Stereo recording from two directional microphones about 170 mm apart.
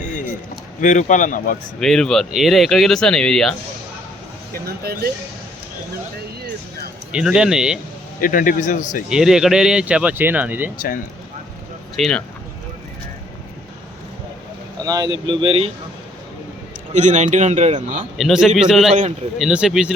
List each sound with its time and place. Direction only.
0.0 s a sound: 45° left (ahead or behind)
0.8 s speech: 45° left (ahead or behind)
1.8 s speech: 5° left (ahead or behind)
4.5 s speech: 65° right (ahead or behind)
7.1 s speech: 5° right (ahead or behind)
8.2 s speech: 55° left (ahead or behind)
9.0 s speech: 5° right (ahead or behind)
10.8 s speech: 55° left (ahead or behind)
11.9 s speech: centre (ahead or behind)
14.8 s speech: 25° right (ahead or behind)
16.9 s speech: 45° right (ahead or behind)
18.2 s speech: centre (ahead or behind)